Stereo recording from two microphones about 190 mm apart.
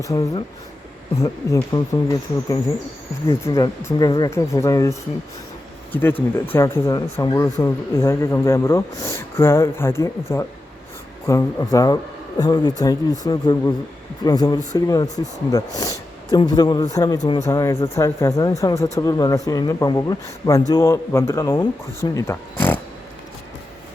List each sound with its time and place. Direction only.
0.0 s speech: 15° left (ahead or behind)